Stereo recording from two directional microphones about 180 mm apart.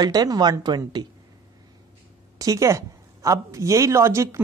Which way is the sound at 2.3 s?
20° right (ahead or behind).